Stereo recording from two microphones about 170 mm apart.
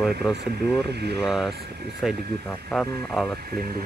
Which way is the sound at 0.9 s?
75° right (ahead or behind).